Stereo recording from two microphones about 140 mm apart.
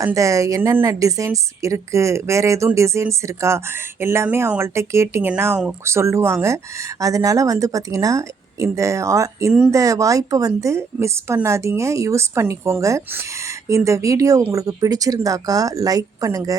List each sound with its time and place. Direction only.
0.0 s a woman's voice: 25° right (ahead or behind)